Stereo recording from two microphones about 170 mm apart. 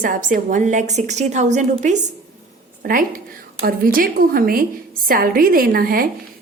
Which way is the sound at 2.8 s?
55° right (ahead or behind).